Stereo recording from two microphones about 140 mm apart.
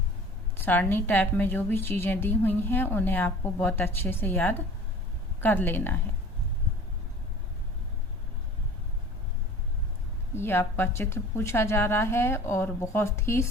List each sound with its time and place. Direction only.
0.5 s a woman's voice: 15° left (ahead or behind)
10.3 s a woman's voice: 15° left (ahead or behind)